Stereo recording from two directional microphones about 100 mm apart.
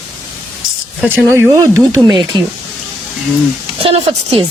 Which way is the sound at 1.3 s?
25° right (ahead or behind).